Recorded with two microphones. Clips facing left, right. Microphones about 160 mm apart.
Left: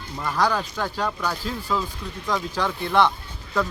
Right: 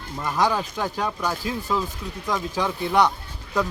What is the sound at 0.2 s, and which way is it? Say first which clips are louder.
Speech: even; 15° right (ahead or behind).